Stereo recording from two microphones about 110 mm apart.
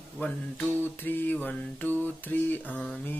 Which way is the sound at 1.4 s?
15° left (ahead or behind).